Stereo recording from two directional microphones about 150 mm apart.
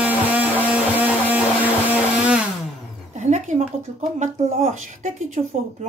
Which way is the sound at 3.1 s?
50° right (ahead or behind).